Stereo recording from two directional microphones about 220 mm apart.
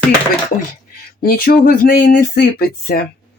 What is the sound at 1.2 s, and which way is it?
Speech, 40° left (ahead or behind).